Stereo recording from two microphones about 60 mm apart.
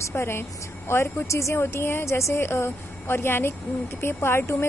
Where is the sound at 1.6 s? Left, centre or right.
Left.